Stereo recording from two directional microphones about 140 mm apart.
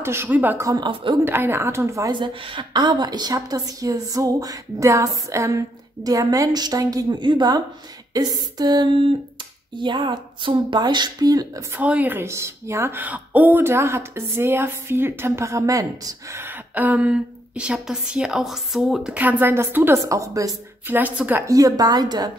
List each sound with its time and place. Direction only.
0.0 s speech: 15° right (ahead or behind)
1.2 s a woman's voice: 15° right (ahead or behind)
2.1 s a woman's voice: 35° right (ahead or behind)
11.7 s speech: 10° right (ahead or behind)
21.5 s a woman's voice: 25° right (ahead or behind)